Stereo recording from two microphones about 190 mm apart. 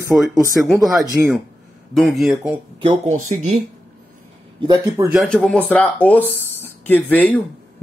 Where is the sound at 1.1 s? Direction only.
Centre (ahead or behind).